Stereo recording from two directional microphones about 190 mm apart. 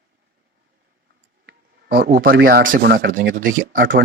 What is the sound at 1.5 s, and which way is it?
Speech, 55° right (ahead or behind).